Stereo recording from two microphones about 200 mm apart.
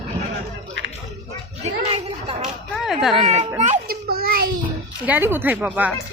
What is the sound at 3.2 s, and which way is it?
Speech, 35° right (ahead or behind).